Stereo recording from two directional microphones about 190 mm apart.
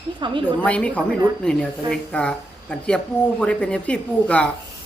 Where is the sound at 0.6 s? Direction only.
5° left (ahead or behind).